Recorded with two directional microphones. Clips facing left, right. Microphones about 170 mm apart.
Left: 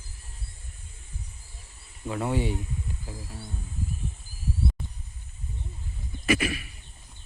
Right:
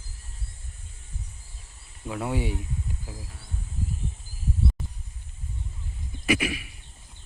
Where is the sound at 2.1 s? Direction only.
5° right (ahead or behind).